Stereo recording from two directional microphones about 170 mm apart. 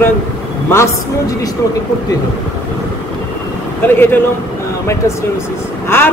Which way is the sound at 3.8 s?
10° left (ahead or behind).